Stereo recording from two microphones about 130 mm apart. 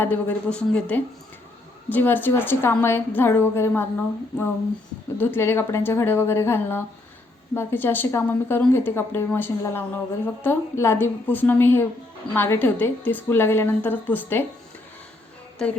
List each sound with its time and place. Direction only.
0.0 s a woman's voice: 15° left (ahead or behind)
5.1 s a woman's voice: 15° left (ahead or behind)